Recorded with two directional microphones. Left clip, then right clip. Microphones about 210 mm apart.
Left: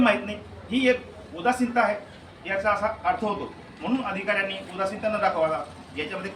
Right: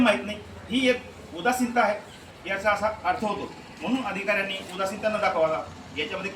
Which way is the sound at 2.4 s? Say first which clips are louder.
Even; 5° left (ahead or behind).